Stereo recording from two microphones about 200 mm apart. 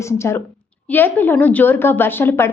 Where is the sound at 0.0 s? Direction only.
15° left (ahead or behind).